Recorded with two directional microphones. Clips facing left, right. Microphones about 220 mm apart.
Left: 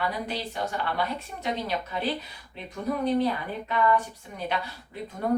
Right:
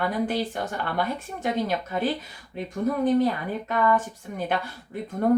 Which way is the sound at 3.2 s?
50° right (ahead or behind).